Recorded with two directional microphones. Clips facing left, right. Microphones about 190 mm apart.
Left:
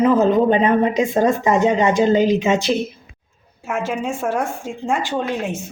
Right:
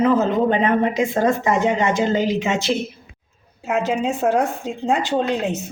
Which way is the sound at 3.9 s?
20° right (ahead or behind).